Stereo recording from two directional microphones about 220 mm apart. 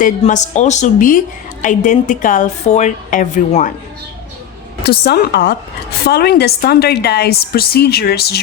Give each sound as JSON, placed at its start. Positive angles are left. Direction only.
{"t": 0.2, "sound": "a woman's voice", "side_deg": 35}
{"t": 4.8, "sound": "a woman's voice", "side_deg": 45}